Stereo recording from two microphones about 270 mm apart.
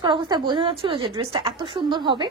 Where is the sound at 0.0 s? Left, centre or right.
Centre.